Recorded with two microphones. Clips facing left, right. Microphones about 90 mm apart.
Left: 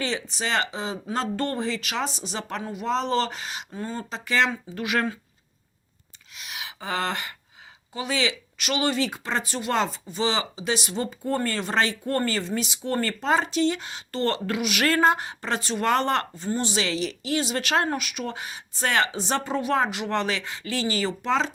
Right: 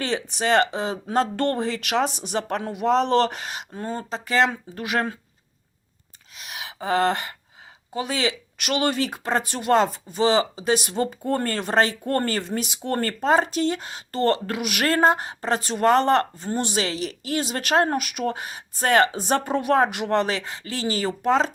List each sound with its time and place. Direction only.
0.0 s speech: 55° right (ahead or behind)
6.3 s a sound: 40° right (ahead or behind)
7.9 s speech: 40° right (ahead or behind)
16.4 s speech: 55° right (ahead or behind)